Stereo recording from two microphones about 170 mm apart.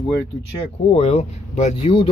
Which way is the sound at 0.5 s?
35° left (ahead or behind).